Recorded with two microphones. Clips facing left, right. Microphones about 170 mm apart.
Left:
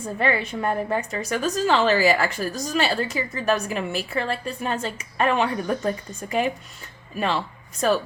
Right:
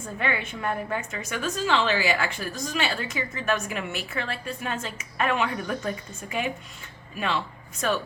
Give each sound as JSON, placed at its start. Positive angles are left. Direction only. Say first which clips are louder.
{"t": 0.2, "sound": "a woman's voice", "louder": "left 6 dB", "side_deg": 35}